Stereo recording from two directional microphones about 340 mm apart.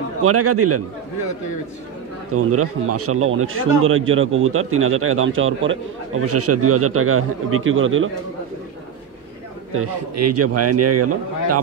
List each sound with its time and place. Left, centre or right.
0.2 s a man's voice: right
2.3 s a man's voice: right
9.8 s a man's voice: right